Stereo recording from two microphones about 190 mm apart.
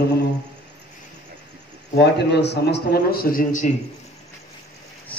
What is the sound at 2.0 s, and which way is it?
A man's voice, 60° left (ahead or behind).